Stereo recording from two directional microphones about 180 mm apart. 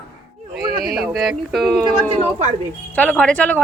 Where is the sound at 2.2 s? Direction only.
35° right (ahead or behind).